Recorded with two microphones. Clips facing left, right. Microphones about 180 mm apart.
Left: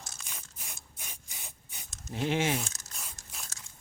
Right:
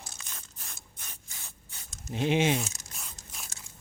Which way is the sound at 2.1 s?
20° right (ahead or behind).